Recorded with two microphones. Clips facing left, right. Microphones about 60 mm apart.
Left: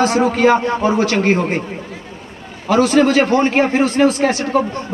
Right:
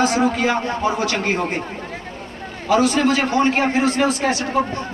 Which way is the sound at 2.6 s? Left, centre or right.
Left.